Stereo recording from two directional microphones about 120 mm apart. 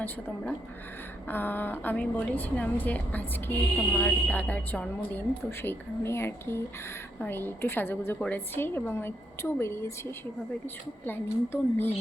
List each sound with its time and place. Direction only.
0.0 s a woman's voice: 15° left (ahead or behind)